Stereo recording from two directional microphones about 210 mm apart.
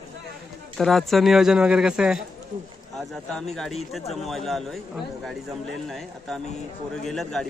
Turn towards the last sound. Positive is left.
turn(degrees=0)  # may be behind; listen again after turning